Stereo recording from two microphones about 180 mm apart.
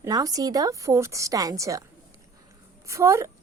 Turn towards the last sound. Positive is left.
turn(degrees=-15)  # may be behind; listen again after turning